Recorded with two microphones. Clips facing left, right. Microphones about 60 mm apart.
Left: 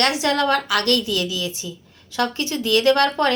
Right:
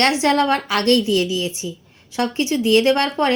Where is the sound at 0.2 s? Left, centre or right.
Right.